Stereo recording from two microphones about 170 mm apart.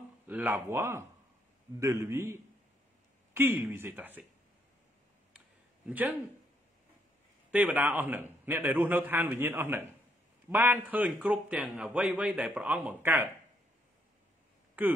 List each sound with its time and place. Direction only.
0.3 s a man's voice: 10° right (ahead or behind)
5.9 s a man's voice: 10° right (ahead or behind)
7.5 s a man's voice: 10° right (ahead or behind)